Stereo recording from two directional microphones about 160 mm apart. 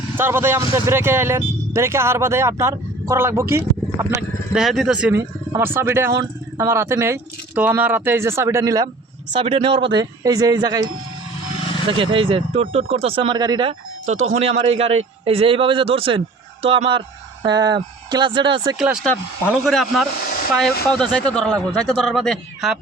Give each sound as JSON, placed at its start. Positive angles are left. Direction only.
{"t": 0.2, "sound": "speech", "side_deg": -15}
{"t": 4.5, "sound": "speech", "side_deg": 0}
{"t": 5.5, "sound": "speech", "side_deg": -15}
{"t": 9.3, "sound": "a man's voice", "side_deg": -35}
{"t": 14.1, "sound": "a man's voice", "side_deg": -45}
{"t": 18.8, "sound": "speech", "side_deg": 0}